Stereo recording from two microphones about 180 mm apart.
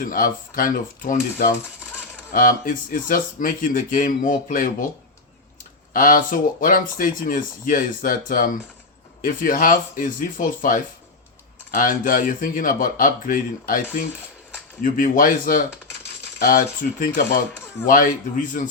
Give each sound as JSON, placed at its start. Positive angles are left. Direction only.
{"t": 0.0, "sound": "speech", "side_deg": 50}
{"t": 5.9, "sound": "speech", "side_deg": 50}